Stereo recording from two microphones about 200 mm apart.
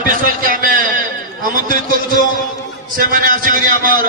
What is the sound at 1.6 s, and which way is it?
A man's voice, 45° right (ahead or behind).